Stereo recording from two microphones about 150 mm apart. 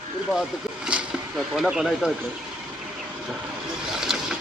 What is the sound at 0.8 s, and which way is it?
Speech, 5° right (ahead or behind).